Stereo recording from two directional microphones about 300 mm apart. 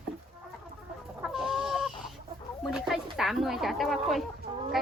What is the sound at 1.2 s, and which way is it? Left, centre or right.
Chicken, centre.